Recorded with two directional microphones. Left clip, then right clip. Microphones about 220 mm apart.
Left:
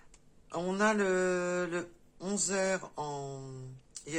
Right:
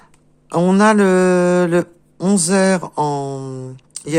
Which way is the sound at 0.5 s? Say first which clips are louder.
Right 16 dB; 50° right (ahead or behind).